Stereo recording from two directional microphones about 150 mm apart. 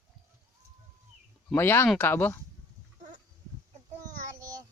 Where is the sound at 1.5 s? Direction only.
15° left (ahead or behind).